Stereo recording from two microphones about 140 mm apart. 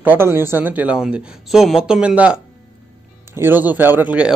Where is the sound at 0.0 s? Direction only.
15° right (ahead or behind).